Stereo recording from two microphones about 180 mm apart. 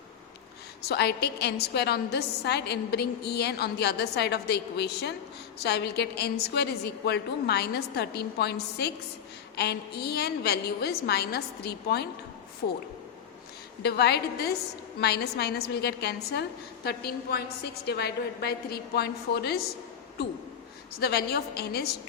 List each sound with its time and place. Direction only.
0.9 s a woman's voice: 65° left (ahead or behind)
13.8 s a woman's voice: 65° left (ahead or behind)
20.9 s a woman's voice: 60° left (ahead or behind)